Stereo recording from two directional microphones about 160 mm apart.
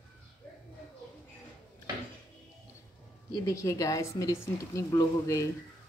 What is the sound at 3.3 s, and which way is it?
Speech, 20° left (ahead or behind).